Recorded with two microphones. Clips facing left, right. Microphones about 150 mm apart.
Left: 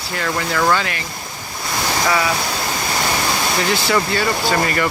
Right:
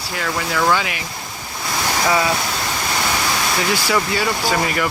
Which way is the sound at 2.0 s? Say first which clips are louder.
Right 1 dB; 20° right (ahead or behind).